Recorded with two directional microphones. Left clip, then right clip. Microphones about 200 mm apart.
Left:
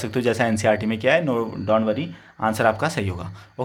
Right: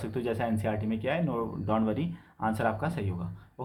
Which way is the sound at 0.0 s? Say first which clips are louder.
Left 10 dB; 35° left (ahead or behind).